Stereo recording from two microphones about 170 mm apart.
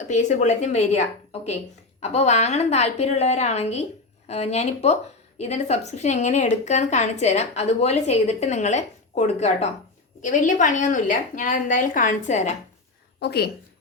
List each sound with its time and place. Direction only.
0.1 s a woman's voice: 45° left (ahead or behind)
13.1 s a woman's voice: 70° left (ahead or behind)